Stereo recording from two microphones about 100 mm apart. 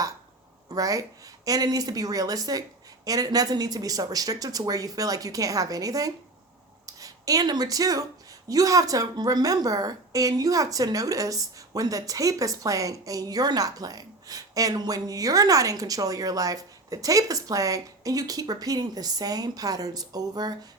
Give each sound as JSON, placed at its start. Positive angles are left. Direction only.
{"t": 0.7, "sound": "a woman's voice", "side_deg": -35}